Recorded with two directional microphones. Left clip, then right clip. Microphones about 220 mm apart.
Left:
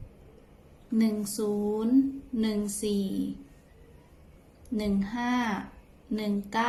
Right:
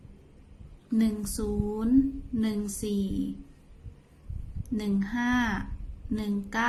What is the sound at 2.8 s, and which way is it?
Speech, 35° right (ahead or behind).